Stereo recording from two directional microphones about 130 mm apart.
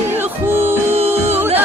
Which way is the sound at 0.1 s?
15° right (ahead or behind).